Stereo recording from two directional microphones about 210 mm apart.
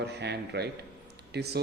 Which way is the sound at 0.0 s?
50° right (ahead or behind).